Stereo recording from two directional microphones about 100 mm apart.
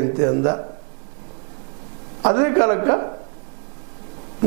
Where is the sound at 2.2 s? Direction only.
30° right (ahead or behind).